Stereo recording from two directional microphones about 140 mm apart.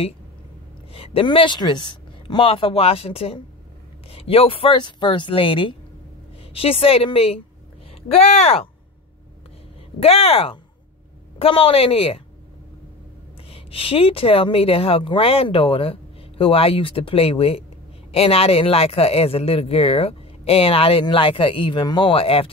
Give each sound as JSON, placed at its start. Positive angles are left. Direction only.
{"t": 0.9, "sound": "speech", "side_deg": 40}
{"t": 10.0, "sound": "speech", "side_deg": 45}
{"t": 13.5, "sound": "speech", "side_deg": 40}